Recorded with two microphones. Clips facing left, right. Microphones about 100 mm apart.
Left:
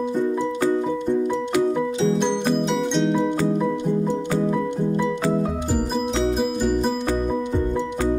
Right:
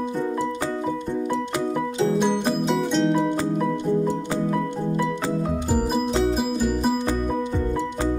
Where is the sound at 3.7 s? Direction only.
20° left (ahead or behind).